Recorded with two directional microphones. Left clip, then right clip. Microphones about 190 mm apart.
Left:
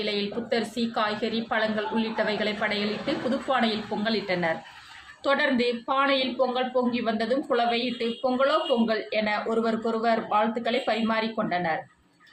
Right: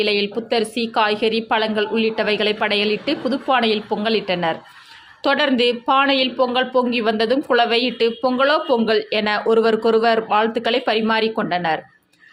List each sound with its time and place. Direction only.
0.0 s speech: 45° right (ahead or behind)